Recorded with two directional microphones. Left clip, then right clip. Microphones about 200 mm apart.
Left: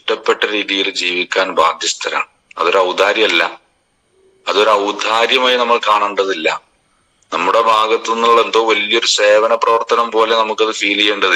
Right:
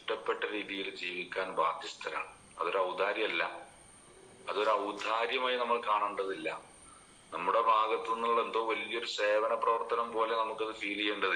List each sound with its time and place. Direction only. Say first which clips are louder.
0.0 s a man's voice: left 19 dB; 60° left (ahead or behind)